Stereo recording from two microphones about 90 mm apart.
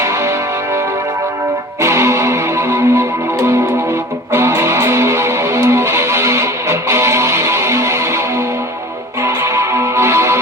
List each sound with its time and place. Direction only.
1.8 s music: 30° right (ahead or behind)
9.2 s music: 30° right (ahead or behind)